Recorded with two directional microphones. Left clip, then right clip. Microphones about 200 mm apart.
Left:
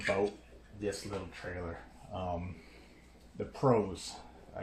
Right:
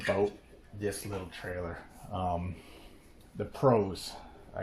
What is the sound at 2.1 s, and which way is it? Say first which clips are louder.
Speech: right 5 dB; 45° right (ahead or behind).